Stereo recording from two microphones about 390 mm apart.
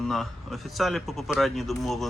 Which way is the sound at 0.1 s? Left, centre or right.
Centre.